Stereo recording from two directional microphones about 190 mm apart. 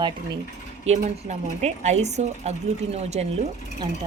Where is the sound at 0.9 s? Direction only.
35° right (ahead or behind).